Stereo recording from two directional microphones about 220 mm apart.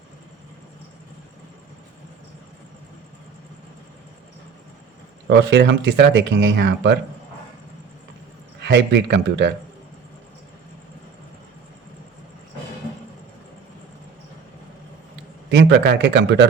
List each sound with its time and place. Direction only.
5.3 s speech: 55° right (ahead or behind)
8.6 s speech: 50° right (ahead or behind)
15.4 s speech: 50° right (ahead or behind)